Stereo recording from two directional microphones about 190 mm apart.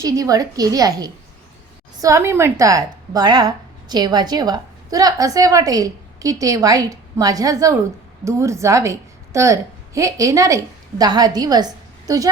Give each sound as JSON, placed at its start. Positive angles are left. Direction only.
{"t": 0.0, "sound": "a woman's voice", "side_deg": -15}